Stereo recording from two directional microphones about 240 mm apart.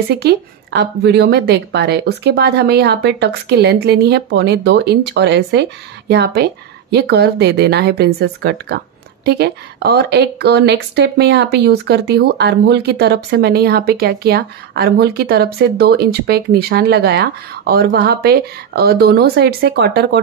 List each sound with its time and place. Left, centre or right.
0.1 s a woman's voice: right